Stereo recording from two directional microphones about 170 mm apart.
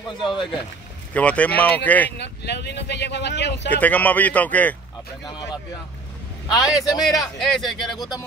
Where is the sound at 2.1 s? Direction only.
85° left.